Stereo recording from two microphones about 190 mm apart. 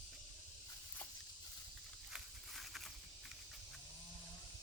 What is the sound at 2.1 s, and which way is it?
Horse, centre (ahead or behind).